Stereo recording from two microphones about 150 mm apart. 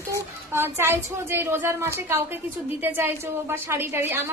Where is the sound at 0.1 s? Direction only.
15° right (ahead or behind).